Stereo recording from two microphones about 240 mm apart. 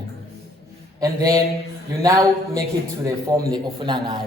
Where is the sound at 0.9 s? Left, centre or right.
Centre.